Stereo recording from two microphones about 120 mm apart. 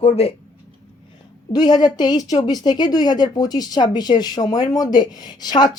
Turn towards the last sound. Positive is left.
turn(degrees=35)  # may be behind; listen again after turning